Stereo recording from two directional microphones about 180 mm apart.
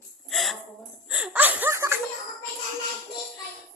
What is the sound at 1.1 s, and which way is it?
Laughter, 5° right (ahead or behind).